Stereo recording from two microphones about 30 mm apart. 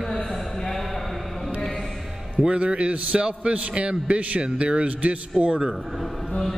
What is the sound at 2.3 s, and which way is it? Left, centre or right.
A man's voice, right.